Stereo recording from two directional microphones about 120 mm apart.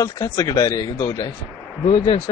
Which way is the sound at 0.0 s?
30° left (ahead or behind).